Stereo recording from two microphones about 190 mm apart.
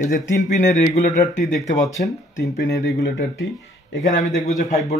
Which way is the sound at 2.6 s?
70° left (ahead or behind).